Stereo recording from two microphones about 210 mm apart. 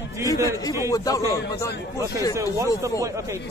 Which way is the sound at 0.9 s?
15° left (ahead or behind).